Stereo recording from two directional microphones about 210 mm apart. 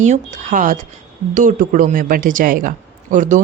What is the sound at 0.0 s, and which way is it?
Speech, 35° right (ahead or behind).